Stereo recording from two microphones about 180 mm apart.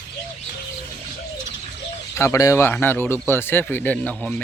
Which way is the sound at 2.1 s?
15° left (ahead or behind).